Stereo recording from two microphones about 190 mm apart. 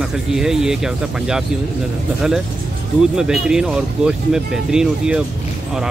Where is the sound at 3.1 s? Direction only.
5° right (ahead or behind).